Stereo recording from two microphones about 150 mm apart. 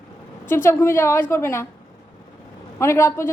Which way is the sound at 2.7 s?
20° left (ahead or behind).